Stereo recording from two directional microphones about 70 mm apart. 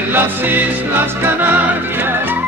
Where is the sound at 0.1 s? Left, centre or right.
Right.